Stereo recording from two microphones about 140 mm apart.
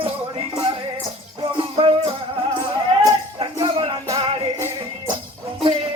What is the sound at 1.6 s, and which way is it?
Music, 40° right (ahead or behind).